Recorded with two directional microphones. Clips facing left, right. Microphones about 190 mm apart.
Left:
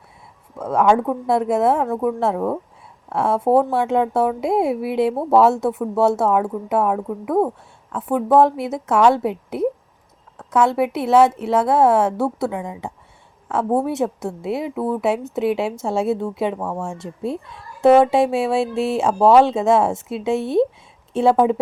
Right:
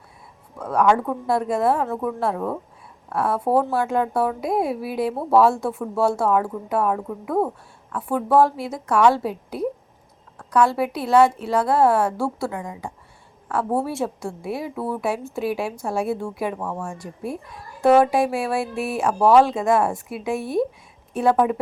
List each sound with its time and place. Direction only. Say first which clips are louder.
0.6 s a woman's voice: left 2 dB; 25° left (ahead or behind)